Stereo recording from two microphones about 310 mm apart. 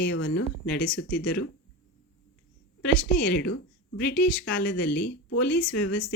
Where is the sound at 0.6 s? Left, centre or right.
Centre.